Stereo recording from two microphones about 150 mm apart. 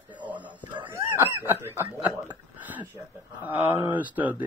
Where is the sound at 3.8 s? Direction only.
10° right (ahead or behind).